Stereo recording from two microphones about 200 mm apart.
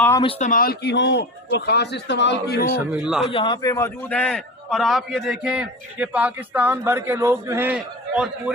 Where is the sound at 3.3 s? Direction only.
25° left (ahead or behind).